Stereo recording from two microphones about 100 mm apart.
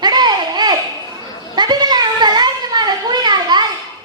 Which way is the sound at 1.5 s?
45° right (ahead or behind).